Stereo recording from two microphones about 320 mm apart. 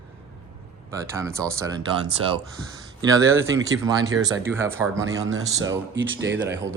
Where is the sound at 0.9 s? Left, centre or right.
Centre.